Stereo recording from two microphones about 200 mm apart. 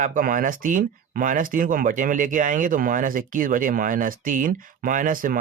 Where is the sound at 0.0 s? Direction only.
40° right (ahead or behind).